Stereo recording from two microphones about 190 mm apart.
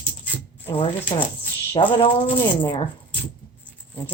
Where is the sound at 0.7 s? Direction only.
30° left (ahead or behind).